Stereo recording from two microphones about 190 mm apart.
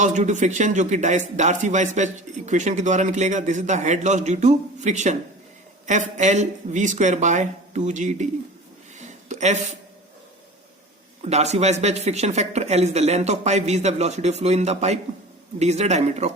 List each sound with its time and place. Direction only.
0.0 s speech: 40° right (ahead or behind)
9.0 s a sound: 40° right (ahead or behind)
11.2 s speech: 35° right (ahead or behind)